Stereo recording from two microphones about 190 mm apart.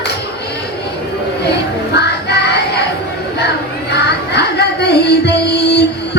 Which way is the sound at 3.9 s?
60° left (ahead or behind).